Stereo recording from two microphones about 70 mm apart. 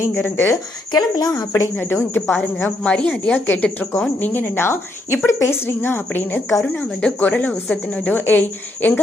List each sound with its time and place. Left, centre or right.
0.0 s a woman's voice: left
0.9 s speech: left
1.7 s a woman's voice: left
2.8 s speech: centre
3.3 s a woman's voice: left